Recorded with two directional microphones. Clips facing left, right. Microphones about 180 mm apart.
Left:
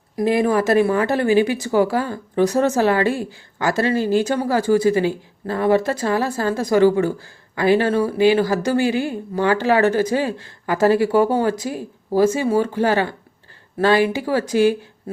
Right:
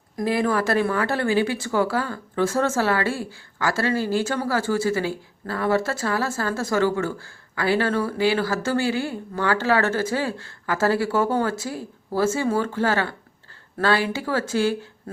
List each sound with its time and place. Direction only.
0.3 s speech: 15° left (ahead or behind)